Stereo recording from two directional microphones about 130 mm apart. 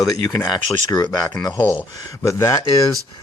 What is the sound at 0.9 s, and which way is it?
Speech, 30° left (ahead or behind).